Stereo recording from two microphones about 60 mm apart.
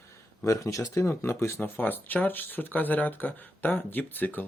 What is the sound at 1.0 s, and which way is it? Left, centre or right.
Speech, left.